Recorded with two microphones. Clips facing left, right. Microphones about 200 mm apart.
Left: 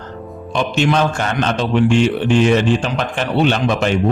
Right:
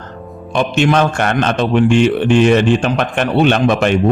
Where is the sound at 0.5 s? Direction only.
55° right (ahead or behind).